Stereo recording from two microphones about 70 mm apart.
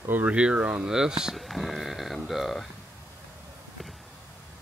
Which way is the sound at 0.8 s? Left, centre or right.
Centre.